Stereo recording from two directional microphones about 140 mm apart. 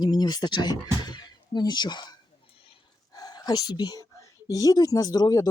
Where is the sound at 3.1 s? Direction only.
30° left (ahead or behind).